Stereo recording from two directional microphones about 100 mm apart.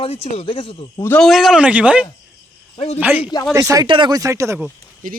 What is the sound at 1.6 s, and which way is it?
A man's voice, 15° right (ahead or behind).